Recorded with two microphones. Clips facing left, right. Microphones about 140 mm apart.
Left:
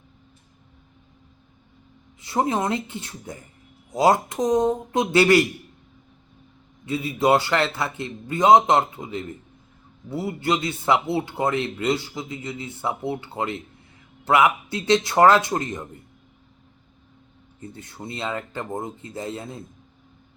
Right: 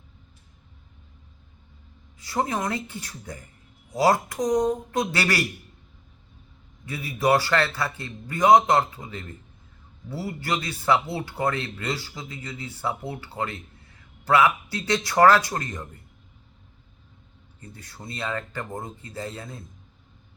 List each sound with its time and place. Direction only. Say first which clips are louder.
2.2 s speech: left 4 dB; 20° left (ahead or behind)
6.8 s speech: left 3 dB; 25° left (ahead or behind)
17.6 s speech: left 6 dB; 20° left (ahead or behind)